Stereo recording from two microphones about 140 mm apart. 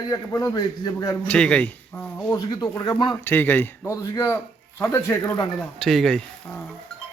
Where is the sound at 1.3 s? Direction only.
5° left (ahead or behind).